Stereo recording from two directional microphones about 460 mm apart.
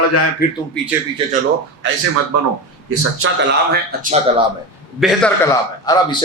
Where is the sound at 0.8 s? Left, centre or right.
Centre.